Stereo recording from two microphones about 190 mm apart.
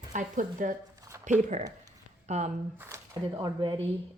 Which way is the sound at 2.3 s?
35° right (ahead or behind).